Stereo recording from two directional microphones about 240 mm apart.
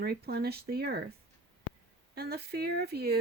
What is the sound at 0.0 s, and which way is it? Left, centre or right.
Speech, right.